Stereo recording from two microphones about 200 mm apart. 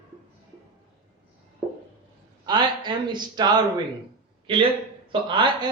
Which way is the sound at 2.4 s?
20° right (ahead or behind).